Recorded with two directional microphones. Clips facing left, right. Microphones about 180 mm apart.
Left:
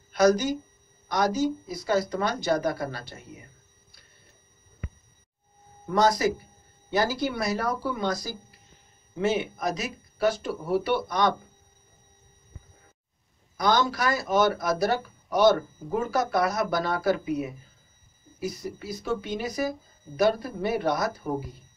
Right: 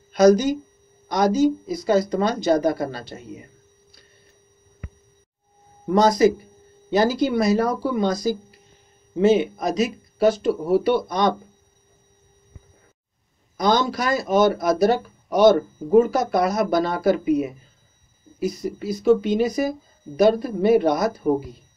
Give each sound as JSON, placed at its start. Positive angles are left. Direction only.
{"t": 0.1, "sound": "speech", "side_deg": -20}
{"t": 5.9, "sound": "speech", "side_deg": -20}
{"t": 13.6, "sound": "speech", "side_deg": -20}